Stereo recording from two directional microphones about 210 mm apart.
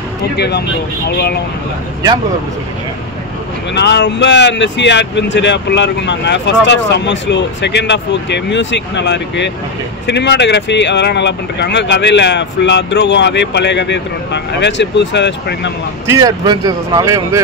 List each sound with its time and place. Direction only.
0.4 s speech: 50° left (ahead or behind)
3.7 s speech: 55° left (ahead or behind)
16.1 s speech: 15° right (ahead or behind)